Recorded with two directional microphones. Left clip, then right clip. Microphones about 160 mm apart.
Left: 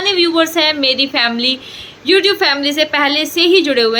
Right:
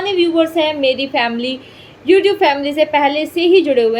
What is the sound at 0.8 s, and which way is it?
Speech, 40° left (ahead or behind).